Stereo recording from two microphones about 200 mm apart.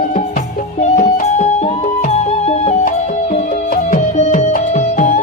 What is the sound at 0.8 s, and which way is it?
Music, 35° left (ahead or behind).